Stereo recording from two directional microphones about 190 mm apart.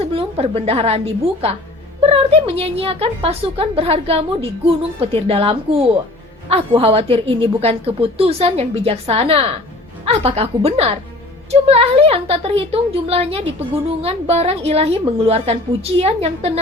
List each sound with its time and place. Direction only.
0.0 s a woman's voice: 30° right (ahead or behind)